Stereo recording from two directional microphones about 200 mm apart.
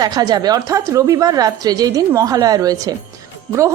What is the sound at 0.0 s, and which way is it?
A woman's voice, 20° right (ahead or behind).